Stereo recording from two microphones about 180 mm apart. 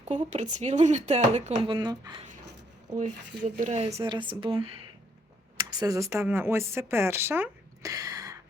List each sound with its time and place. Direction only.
0.0 s speech: 40° right (ahead or behind); by 2.2 s 20° right (ahead or behind)
3.0 s a woman's voice: 45° right (ahead or behind); by 8.4 s 20° right (ahead or behind)